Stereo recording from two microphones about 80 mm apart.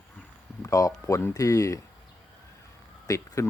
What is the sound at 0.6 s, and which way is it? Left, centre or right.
Speech, left.